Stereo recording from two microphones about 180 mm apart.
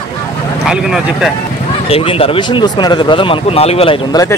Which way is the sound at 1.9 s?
30° left (ahead or behind).